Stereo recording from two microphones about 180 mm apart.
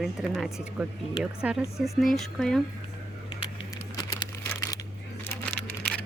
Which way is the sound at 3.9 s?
25° left (ahead or behind).